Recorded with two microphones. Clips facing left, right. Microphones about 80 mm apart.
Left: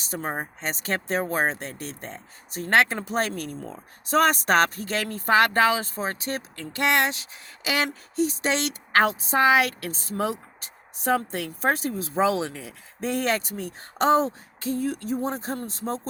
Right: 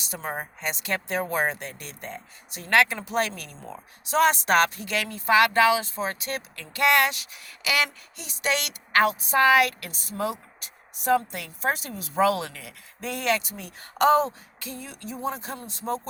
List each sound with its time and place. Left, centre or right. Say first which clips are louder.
0.0 s speech: left 2 dB; left